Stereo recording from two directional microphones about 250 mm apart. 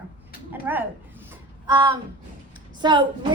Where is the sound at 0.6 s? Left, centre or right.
Centre.